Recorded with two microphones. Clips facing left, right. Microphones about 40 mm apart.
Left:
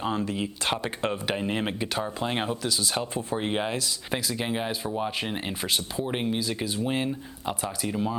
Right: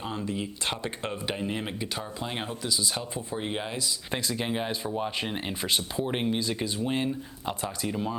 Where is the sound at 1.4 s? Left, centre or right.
Left.